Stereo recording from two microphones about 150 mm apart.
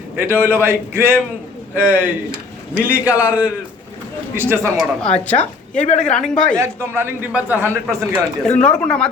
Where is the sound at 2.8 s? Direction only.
10° right (ahead or behind).